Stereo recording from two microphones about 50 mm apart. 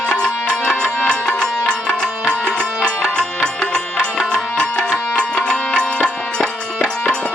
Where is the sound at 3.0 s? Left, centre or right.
Centre.